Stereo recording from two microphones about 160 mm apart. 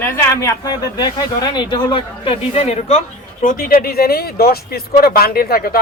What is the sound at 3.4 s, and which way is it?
Speech, 60° left (ahead or behind).